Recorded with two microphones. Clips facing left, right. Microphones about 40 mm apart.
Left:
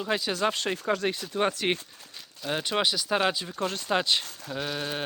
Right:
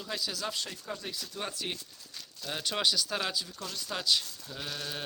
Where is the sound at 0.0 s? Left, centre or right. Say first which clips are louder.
Left 9 dB; left.